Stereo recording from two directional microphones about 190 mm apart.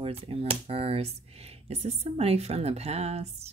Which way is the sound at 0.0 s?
30° right (ahead or behind).